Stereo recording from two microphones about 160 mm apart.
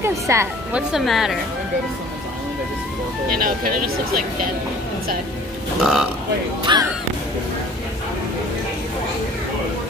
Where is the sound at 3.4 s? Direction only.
60° right (ahead or behind).